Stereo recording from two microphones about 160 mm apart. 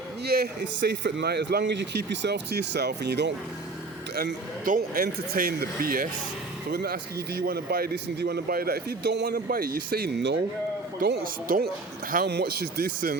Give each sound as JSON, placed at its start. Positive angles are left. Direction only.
{"t": 0.3, "sound": "a man's voice", "side_deg": -80}
{"t": 4.1, "sound": "speech", "side_deg": -80}
{"t": 6.7, "sound": "speech", "side_deg": -85}
{"t": 12.1, "sound": "speech", "side_deg": -90}